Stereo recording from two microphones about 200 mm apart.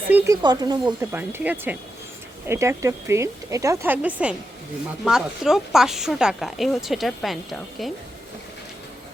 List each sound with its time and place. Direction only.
0.1 s speech: 10° right (ahead or behind)
0.4 s speech: 20° right (ahead or behind)
1.1 s speech: 10° right (ahead or behind)